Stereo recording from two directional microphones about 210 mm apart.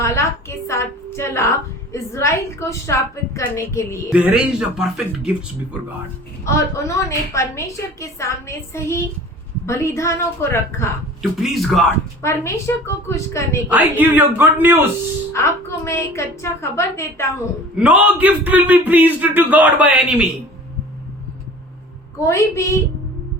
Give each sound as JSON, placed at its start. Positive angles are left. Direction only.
{"t": 0.0, "sound": "a woman's voice", "side_deg": 15}
{"t": 4.1, "sound": "speech", "side_deg": -5}
{"t": 6.4, "sound": "a woman's voice", "side_deg": 15}
{"t": 11.2, "sound": "speech", "side_deg": 0}
{"t": 12.2, "sound": "a woman's voice", "side_deg": 15}
{"t": 13.7, "sound": "a man's voice", "side_deg": -10}
{"t": 15.3, "sound": "a woman's voice", "side_deg": 15}
{"t": 17.7, "sound": "a man's voice", "side_deg": -5}
{"t": 22.2, "sound": "a woman's voice", "side_deg": 15}